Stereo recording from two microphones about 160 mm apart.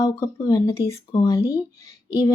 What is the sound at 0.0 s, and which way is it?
A woman's voice, 20° left (ahead or behind).